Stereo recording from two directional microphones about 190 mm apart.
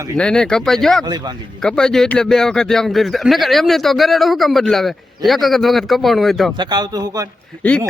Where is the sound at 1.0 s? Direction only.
20° right (ahead or behind).